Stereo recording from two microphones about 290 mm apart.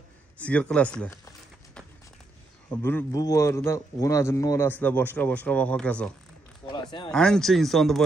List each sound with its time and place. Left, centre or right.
0.4 s a man's voice: centre
2.7 s speech: centre
6.7 s speech: centre
7.1 s a man's voice: centre